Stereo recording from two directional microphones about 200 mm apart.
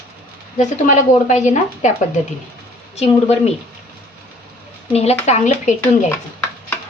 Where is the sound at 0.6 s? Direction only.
35° left (ahead or behind).